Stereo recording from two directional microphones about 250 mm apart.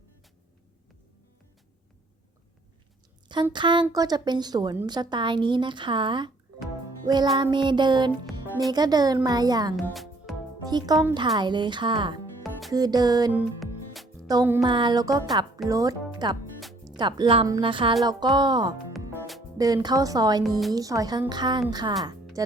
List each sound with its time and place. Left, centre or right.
3.2 s a woman's voice: centre
7.3 s a woman's voice: centre
9.7 s music: centre
10.6 s a woman's voice: centre
12.4 s music: centre
12.7 s a woman's voice: centre
13.6 s music: centre
14.3 s a woman's voice: centre